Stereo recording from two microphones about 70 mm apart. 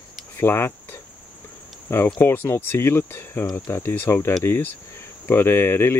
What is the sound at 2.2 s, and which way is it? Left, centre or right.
Speech, left.